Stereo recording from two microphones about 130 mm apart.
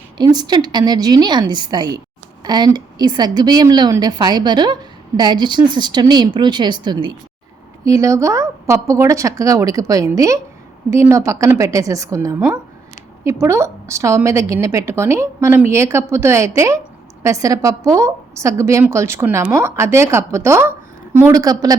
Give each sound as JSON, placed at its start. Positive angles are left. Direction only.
{"t": 0.2, "sound": "a woman's voice", "side_deg": -30}
{"t": 21.3, "sound": "a woman's voice", "side_deg": -30}